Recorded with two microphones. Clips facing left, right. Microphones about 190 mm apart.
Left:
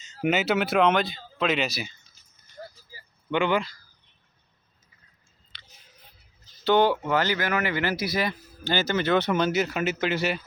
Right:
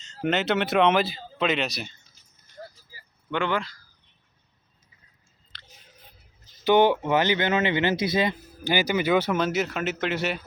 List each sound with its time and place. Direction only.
0.0 s speech: 5° left (ahead or behind)
3.2 s speech: 10° left (ahead or behind)
6.7 s speech: 20° right (ahead or behind); by 10.4 s centre (ahead or behind)